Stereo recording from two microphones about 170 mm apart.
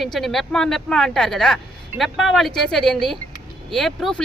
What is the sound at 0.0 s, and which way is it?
Speech, centre (ahead or behind).